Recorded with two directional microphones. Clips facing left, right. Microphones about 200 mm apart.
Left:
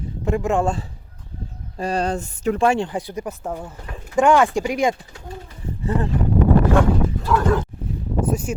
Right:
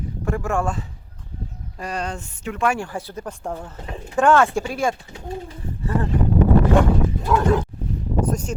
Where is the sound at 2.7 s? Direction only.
20° left (ahead or behind).